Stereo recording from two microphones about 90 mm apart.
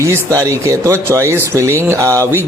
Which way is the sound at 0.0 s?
35° right (ahead or behind).